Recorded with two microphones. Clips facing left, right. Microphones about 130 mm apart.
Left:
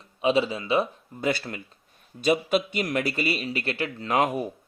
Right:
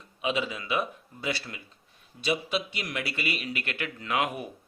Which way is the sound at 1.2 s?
45° left (ahead or behind).